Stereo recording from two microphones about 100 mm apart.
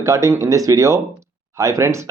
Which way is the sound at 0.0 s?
30° right (ahead or behind).